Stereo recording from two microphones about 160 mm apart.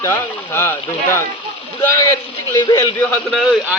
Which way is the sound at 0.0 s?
15° left (ahead or behind).